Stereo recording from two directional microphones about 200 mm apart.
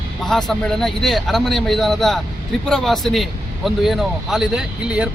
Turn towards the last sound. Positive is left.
turn(degrees=-5)  # may be behind; listen again after turning